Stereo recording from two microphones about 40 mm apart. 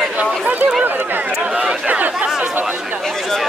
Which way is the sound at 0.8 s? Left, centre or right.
Right.